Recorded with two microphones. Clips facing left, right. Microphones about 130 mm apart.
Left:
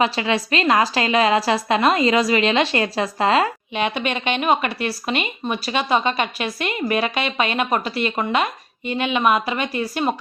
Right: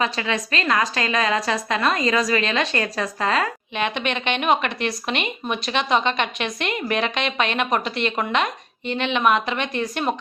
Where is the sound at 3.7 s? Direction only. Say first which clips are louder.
Left 1 dB; 10° left (ahead or behind).